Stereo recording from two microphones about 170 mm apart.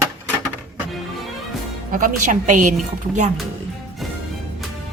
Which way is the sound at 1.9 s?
50° right (ahead or behind).